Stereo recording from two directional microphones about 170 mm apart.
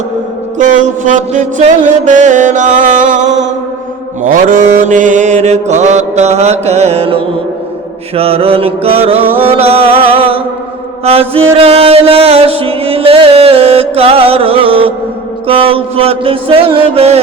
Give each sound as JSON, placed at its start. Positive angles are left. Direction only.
{"t": 0.6, "sound": "music", "side_deg": -45}
{"t": 4.2, "sound": "mantra", "side_deg": -50}